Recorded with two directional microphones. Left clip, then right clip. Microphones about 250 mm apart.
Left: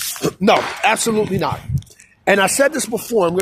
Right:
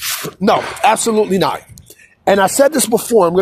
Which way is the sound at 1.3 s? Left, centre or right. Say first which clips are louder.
Right 5 dB; right.